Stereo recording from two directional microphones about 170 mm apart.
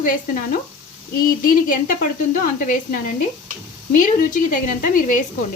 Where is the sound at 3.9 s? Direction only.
55° left (ahead or behind).